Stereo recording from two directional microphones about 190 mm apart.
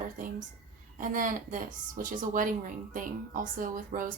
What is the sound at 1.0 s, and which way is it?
Speech, 45° right (ahead or behind).